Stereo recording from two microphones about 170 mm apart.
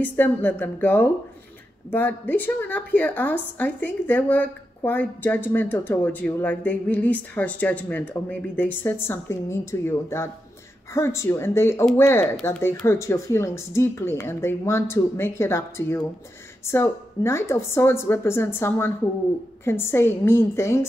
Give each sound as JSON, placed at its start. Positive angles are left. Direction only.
{"t": 0.0, "sound": "a woman's voice", "side_deg": 10}